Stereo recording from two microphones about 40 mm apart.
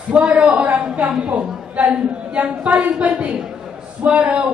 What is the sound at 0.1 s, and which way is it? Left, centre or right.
A woman's voice, right.